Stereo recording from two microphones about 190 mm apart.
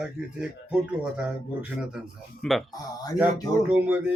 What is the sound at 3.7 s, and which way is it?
Speech, 10° right (ahead or behind).